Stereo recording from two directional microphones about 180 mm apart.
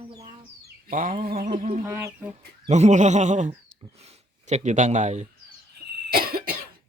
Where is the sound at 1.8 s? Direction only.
15° right (ahead or behind).